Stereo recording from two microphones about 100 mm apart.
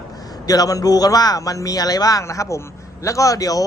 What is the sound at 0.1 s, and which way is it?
A man's voice, 40° left (ahead or behind).